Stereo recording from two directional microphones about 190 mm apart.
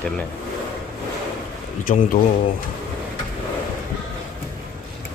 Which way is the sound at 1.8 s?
45° left (ahead or behind).